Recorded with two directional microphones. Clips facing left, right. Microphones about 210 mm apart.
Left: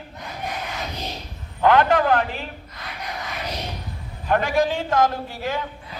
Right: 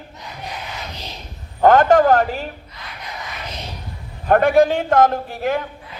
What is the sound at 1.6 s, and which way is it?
Speech, 45° right (ahead or behind).